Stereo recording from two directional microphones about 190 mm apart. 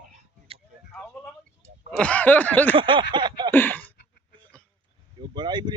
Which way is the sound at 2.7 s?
25° right (ahead or behind).